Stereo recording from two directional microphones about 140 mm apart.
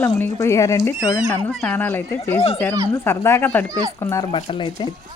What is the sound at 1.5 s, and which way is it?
Speech, 10° left (ahead or behind).